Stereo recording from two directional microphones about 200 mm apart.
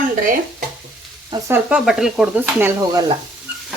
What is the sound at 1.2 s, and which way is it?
Stir, 15° right (ahead or behind).